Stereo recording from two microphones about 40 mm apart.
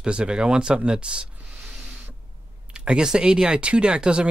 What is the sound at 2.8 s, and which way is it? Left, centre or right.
Speech, right.